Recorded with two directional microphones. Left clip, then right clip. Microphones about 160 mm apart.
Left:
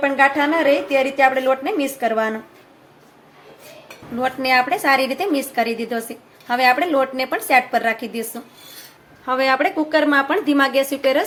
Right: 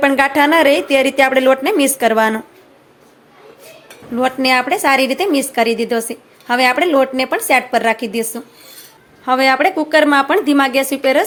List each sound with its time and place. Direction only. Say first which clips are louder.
0.0 s a woman's voice: right 4 dB; 55° right (ahead or behind)
4.2 s a woman's voice: right 3 dB; 40° right (ahead or behind)